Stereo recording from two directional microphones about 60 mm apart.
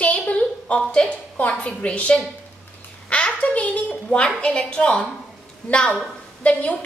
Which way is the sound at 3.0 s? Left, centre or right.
Left.